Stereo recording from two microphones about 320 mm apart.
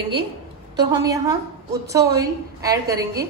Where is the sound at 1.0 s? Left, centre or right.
Centre.